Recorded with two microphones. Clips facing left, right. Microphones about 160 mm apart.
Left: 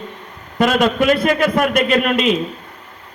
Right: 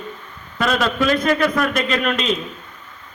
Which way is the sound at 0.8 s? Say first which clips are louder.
Left 4 dB; 15° left (ahead or behind).